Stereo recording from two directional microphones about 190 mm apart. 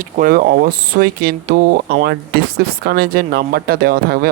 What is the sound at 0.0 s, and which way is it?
Speech, 45° right (ahead or behind).